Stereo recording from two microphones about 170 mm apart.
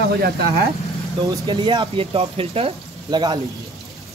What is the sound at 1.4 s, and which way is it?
Speech, 25° right (ahead or behind).